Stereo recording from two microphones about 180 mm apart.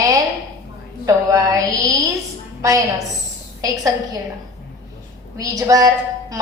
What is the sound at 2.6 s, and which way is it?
A woman's voice, 15° right (ahead or behind).